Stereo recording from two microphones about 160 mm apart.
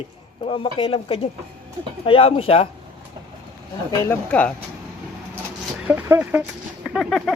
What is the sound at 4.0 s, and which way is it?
Speech, 10° left (ahead or behind).